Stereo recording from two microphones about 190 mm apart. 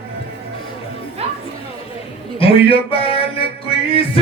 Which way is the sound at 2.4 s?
30° left (ahead or behind).